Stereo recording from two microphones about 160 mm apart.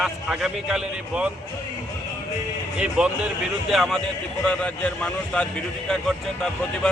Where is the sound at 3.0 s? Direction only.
5° right (ahead or behind).